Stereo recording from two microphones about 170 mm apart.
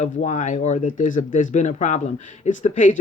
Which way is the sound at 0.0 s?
45° left (ahead or behind).